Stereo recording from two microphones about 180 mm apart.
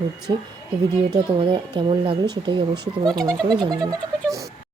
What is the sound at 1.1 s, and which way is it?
Speech, 25° right (ahead or behind).